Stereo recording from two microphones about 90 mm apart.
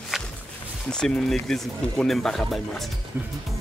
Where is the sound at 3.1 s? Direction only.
25° right (ahead or behind).